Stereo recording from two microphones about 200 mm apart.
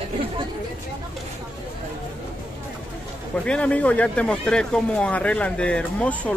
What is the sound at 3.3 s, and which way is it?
Speech, 5° left (ahead or behind).